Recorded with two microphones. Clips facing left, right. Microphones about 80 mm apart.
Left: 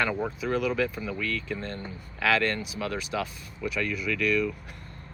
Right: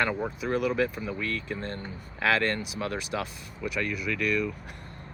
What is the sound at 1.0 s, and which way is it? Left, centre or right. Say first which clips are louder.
Speech: left 1 dB; right.